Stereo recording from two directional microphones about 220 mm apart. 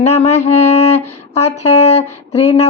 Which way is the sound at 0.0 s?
30° left (ahead or behind).